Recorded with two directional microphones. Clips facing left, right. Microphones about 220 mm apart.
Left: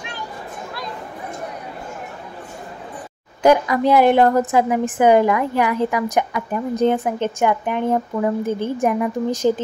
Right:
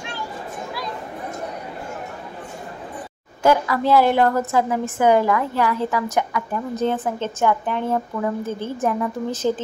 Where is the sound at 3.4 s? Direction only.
15° left (ahead or behind).